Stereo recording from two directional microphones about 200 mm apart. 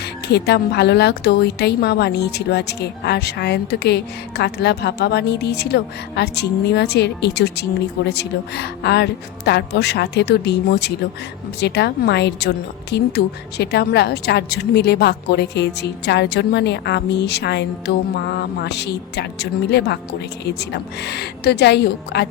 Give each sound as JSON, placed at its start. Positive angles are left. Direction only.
{"t": 0.0, "sound": "speech", "side_deg": 55}